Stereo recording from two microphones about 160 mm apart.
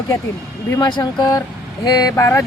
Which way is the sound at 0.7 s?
25° left (ahead or behind).